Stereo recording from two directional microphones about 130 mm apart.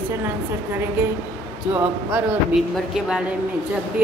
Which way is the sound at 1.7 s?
10° right (ahead or behind).